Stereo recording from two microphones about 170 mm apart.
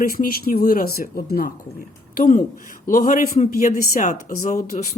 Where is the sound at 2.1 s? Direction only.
50° left (ahead or behind).